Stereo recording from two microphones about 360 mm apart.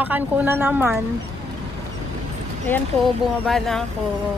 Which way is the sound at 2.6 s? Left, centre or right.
Centre.